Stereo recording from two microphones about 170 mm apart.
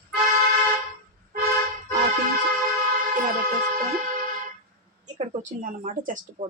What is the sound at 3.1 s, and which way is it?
Music, 55° right (ahead or behind).